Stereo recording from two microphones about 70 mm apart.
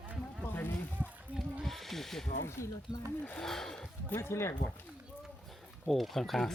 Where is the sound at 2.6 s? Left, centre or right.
Left.